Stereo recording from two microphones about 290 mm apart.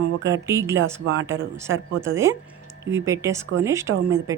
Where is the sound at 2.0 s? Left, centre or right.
Centre.